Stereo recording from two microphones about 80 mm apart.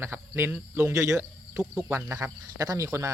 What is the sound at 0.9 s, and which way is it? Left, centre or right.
Speech, right.